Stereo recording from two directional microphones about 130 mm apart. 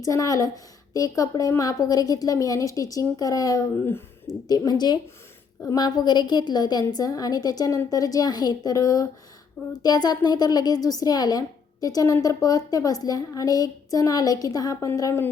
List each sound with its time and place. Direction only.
0.0 s a woman's voice: 25° left (ahead or behind)